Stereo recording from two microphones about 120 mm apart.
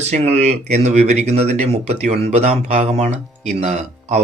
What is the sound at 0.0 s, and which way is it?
Speech, 65° right (ahead or behind).